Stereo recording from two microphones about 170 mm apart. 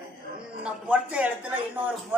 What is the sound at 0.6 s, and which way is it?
Speech, 5° right (ahead or behind).